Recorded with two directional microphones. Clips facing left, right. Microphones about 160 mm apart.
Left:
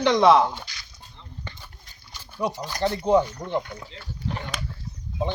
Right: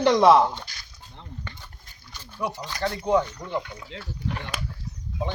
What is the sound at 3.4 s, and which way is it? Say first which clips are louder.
Chopping: left 3 dB; 10° left (ahead or behind).